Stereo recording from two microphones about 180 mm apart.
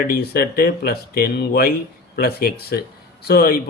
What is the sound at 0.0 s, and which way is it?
Speech, 55° left (ahead or behind).